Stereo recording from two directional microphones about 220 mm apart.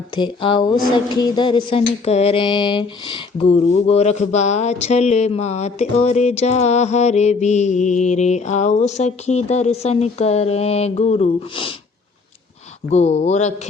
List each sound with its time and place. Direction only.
0.2 s speech: 20° left (ahead or behind)
0.9 s a sound: 20° left (ahead or behind)
12.9 s speech: 30° left (ahead or behind)